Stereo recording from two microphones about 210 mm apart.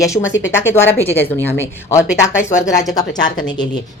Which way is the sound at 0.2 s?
65° left (ahead or behind).